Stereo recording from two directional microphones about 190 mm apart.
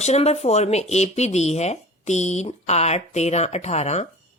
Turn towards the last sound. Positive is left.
turn(degrees=35)  # may be behind; listen again after turning